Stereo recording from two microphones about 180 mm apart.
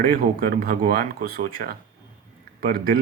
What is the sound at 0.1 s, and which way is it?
Speech, 55° right (ahead or behind).